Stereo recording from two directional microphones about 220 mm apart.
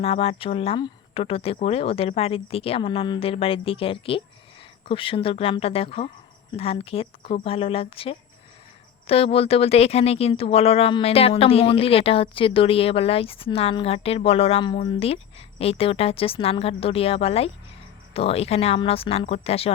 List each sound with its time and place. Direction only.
0.0 s speech: 25° left (ahead or behind)